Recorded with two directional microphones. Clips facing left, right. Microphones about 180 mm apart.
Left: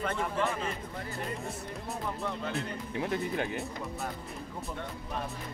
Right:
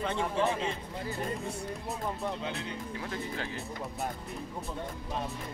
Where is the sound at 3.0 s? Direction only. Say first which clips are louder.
Left 8 dB; 20° left (ahead or behind).